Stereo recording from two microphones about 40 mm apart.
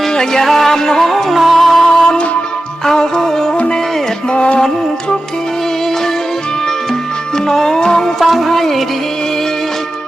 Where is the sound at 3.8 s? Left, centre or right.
Centre.